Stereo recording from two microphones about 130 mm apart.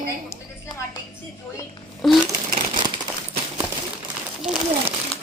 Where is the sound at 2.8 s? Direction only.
35° right (ahead or behind).